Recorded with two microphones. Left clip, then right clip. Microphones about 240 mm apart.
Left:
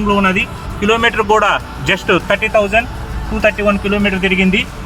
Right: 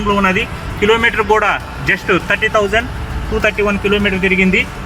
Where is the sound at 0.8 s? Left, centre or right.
Centre.